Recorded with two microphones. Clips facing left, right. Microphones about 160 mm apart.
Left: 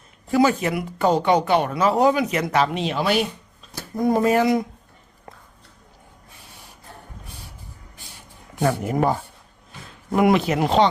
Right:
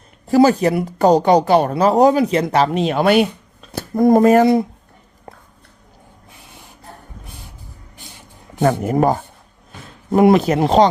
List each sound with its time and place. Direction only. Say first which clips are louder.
0.3 s speech: right 6 dB; 35° right (ahead or behind)
8.6 s speech: right 5 dB; 45° right (ahead or behind)
10.1 s a man's voice: right 6 dB; 30° right (ahead or behind)
10.3 s speech: right 5 dB; 40° right (ahead or behind)